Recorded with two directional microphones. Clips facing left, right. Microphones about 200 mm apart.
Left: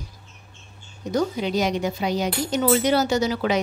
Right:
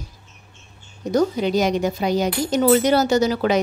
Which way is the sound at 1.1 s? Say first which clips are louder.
Right 4 dB; 45° right (ahead or behind).